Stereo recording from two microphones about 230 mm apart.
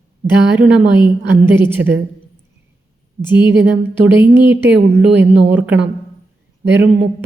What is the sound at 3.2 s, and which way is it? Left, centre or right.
A woman's voice, centre.